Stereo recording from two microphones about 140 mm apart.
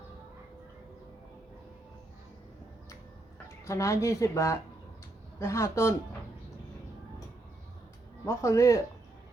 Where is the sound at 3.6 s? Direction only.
20° left (ahead or behind).